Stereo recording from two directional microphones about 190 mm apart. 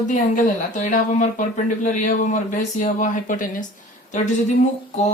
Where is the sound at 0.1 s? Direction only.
40° left (ahead or behind).